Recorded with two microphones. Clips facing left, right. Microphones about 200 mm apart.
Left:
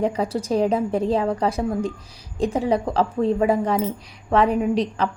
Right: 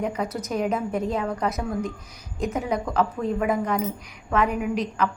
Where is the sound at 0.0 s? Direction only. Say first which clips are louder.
Left 5 dB; 30° left (ahead or behind).